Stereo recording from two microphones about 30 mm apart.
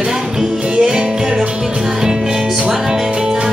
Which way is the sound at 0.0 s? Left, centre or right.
Centre.